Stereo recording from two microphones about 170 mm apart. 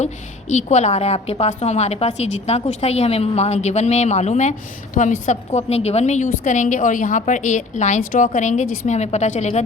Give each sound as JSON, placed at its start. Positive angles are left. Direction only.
{"t": 0.0, "sound": "a woman's voice", "side_deg": 45}